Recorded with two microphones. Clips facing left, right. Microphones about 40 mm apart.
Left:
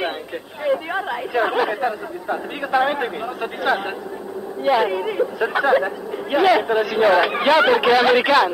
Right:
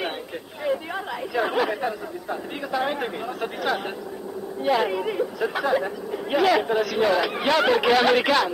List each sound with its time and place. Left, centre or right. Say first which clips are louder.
0.7 s speech: left 5 dB; left
6.3 s speech: left 4 dB; centre